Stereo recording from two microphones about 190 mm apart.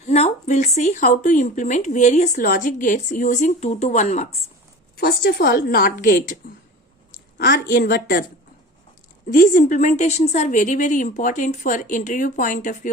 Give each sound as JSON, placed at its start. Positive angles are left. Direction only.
{"t": 0.0, "sound": "speech", "side_deg": 35}
{"t": 4.9, "sound": "a woman's voice", "side_deg": 55}
{"t": 7.3, "sound": "a woman's voice", "side_deg": 55}
{"t": 9.3, "sound": "speech", "side_deg": 45}